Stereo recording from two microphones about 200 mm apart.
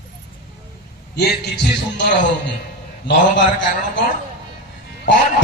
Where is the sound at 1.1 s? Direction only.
55° left (ahead or behind).